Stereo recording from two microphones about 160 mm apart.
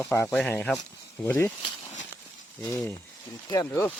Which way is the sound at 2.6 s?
15° left (ahead or behind).